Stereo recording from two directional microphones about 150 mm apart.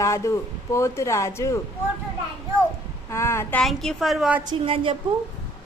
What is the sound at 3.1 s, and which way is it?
Speech, 20° left (ahead or behind).